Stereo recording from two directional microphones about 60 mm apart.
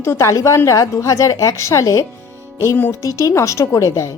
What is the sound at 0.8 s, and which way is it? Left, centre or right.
A woman's voice, left.